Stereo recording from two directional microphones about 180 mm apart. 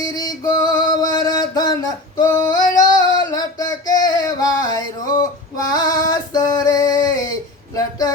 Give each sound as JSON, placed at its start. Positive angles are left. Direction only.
{"t": 0.0, "sound": "music", "side_deg": 20}
{"t": 2.1, "sound": "female singing", "side_deg": 20}
{"t": 5.7, "sound": "a sound", "side_deg": 20}